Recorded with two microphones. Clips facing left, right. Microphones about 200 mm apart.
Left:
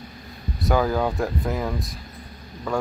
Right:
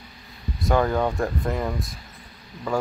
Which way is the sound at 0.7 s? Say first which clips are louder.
Even; centre (ahead or behind).